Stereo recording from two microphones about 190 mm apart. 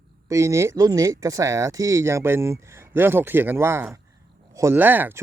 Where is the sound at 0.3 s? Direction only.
15° right (ahead or behind).